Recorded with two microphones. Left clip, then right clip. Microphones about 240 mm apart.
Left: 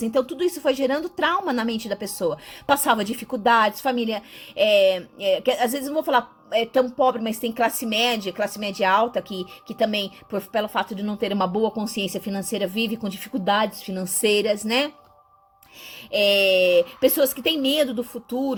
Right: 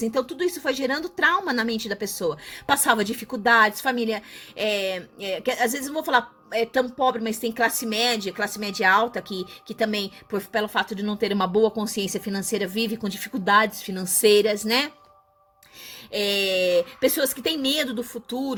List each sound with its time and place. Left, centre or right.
0.0 s speech: right
9.3 s speech: right
9.8 s speech: right
11.9 s speech: right
12.2 s speech: right
16.6 s speech: right